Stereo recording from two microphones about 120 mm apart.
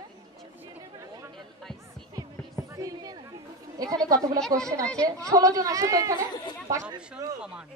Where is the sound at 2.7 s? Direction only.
30° right (ahead or behind).